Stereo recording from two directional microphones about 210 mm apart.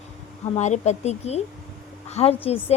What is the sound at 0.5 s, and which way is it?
A woman's voice, 35° left (ahead or behind).